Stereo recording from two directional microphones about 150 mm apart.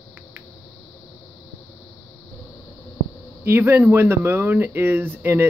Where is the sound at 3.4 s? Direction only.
15° right (ahead or behind).